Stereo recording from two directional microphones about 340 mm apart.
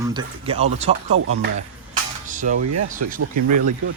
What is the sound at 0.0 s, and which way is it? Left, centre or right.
Speech, centre.